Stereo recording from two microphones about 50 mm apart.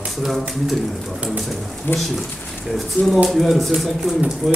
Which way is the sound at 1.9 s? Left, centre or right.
Left.